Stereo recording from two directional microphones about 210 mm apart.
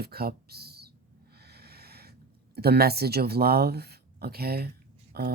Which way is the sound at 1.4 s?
50° right (ahead or behind).